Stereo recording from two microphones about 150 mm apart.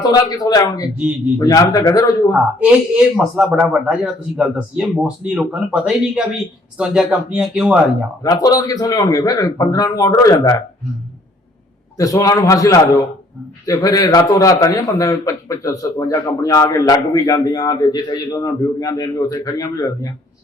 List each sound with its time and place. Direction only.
0.0 s a man's voice: 25° left (ahead or behind)
2.3 s speech: 10° right (ahead or behind)
8.2 s a man's voice: 25° left (ahead or behind)
11.9 s a man's voice: 25° left (ahead or behind)